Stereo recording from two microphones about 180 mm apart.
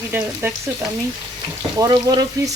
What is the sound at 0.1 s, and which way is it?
Speech, 10° right (ahead or behind).